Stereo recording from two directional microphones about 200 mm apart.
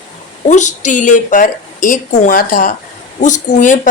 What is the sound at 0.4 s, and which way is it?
Speech, 35° left (ahead or behind).